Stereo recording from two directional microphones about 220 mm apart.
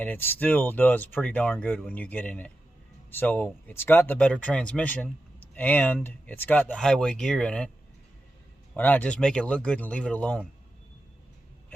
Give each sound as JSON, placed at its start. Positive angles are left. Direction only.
{"t": 0.0, "sound": "speech", "side_deg": 10}
{"t": 8.7, "sound": "speech", "side_deg": 10}